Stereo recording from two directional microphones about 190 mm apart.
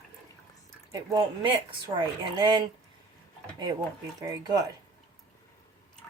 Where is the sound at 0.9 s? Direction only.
20° right (ahead or behind).